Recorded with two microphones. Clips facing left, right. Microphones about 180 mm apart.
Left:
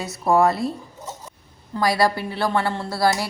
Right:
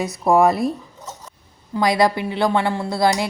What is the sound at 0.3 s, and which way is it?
Speech, 15° right (ahead or behind).